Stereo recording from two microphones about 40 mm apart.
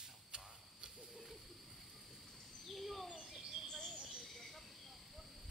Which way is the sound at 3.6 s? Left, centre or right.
Centre.